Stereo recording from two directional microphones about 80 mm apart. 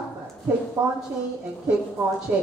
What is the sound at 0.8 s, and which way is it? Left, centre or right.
Speech, right.